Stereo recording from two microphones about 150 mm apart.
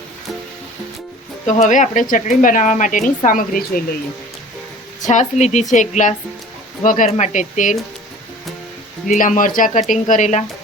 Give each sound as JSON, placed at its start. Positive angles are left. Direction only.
{"t": 1.5, "sound": "speech", "side_deg": 55}
{"t": 5.0, "sound": "a woman's voice", "side_deg": 50}
{"t": 9.0, "sound": "a woman's voice", "side_deg": 60}